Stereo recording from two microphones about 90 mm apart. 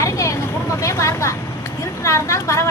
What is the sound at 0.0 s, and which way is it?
Vehicle, 35° left (ahead or behind).